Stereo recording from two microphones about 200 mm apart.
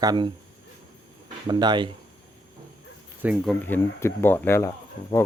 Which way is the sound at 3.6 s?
10° left (ahead or behind).